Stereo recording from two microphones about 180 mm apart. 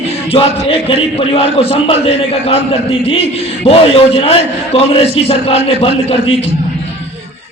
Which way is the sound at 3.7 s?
30° left (ahead or behind).